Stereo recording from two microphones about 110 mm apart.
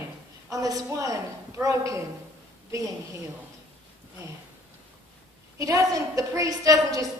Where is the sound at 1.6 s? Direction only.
15° right (ahead or behind).